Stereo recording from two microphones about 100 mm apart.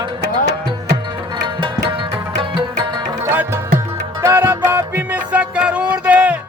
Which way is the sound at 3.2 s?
25° right (ahead or behind).